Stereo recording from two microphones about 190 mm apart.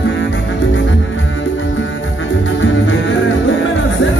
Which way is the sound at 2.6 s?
90° left.